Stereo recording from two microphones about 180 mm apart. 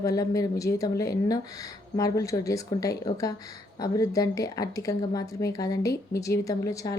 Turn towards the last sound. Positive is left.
turn(degrees=20)  # may be behind; listen again after turning